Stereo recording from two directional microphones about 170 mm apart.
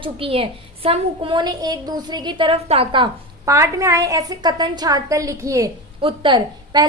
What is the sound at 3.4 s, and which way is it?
A woman's voice, 15° right (ahead or behind).